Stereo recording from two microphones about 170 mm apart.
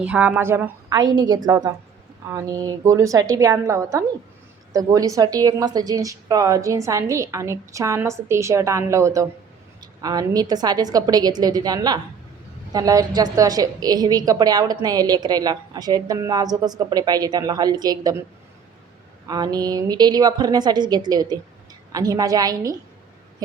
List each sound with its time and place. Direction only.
0.0 s a woman's voice: 10° right (ahead or behind)
0.9 s a woman's voice: 25° right (ahead or behind)
19.3 s a woman's voice: 20° right (ahead or behind)